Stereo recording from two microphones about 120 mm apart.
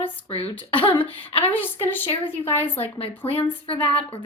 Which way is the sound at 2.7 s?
55° left (ahead or behind).